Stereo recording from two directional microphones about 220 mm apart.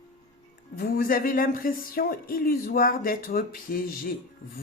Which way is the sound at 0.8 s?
45° left (ahead or behind).